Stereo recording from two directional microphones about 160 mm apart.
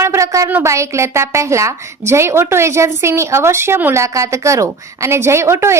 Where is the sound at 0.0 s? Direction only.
20° right (ahead or behind).